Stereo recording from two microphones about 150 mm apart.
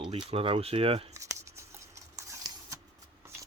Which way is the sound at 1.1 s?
20° right (ahead or behind).